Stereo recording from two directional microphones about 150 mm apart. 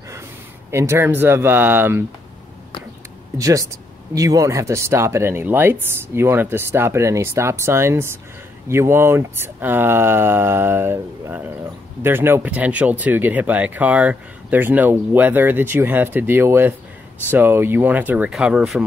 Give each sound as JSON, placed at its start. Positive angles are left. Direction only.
{"t": 0.7, "sound": "speech", "side_deg": -15}
{"t": 3.3, "sound": "speech", "side_deg": -25}